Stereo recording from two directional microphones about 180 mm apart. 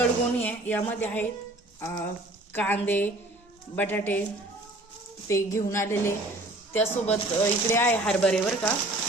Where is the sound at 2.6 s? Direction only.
10° left (ahead or behind).